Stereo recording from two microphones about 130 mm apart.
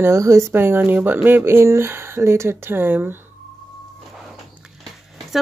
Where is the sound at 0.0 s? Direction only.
20° right (ahead or behind).